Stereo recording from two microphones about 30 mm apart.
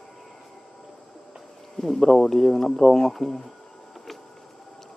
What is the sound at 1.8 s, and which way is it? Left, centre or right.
Speech, centre.